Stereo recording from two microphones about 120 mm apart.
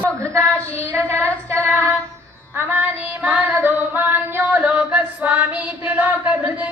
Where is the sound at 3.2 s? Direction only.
5° right (ahead or behind).